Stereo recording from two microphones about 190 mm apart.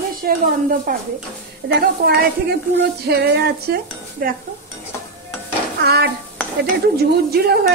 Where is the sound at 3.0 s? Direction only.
55° right (ahead or behind).